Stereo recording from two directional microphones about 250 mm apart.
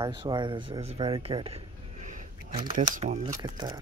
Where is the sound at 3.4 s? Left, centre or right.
Centre.